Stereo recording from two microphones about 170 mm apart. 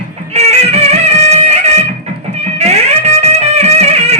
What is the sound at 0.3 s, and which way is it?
Music, 40° right (ahead or behind).